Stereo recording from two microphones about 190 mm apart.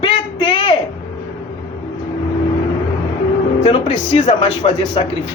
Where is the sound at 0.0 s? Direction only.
25° left (ahead or behind).